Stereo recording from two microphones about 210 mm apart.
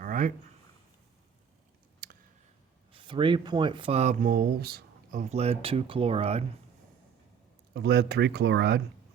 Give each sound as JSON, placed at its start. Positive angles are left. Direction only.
{"t": 0.0, "sound": "a sound", "side_deg": -40}
{"t": 3.1, "sound": "speech", "side_deg": -25}
{"t": 5.3, "sound": "speech", "side_deg": -30}
{"t": 7.7, "sound": "speech", "side_deg": -55}